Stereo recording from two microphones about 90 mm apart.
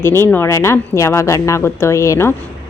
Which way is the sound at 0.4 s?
30° left (ahead or behind).